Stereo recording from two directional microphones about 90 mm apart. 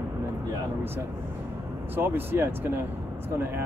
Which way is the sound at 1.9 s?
25° right (ahead or behind).